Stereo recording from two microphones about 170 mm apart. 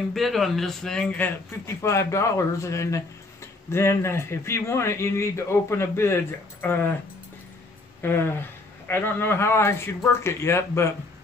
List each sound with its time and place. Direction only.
0.1 s speech: centre (ahead or behind)
1.8 s speech: 15° left (ahead or behind)
8.0 s speech: 15° left (ahead or behind)